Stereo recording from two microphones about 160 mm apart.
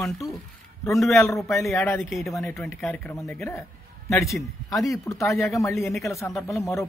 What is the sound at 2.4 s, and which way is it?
A man's voice, centre (ahead or behind).